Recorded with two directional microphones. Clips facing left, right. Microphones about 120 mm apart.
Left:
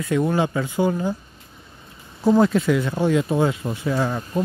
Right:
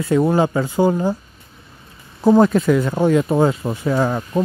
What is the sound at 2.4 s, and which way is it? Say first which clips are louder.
Speech: right 4 dB; 45° right (ahead or behind).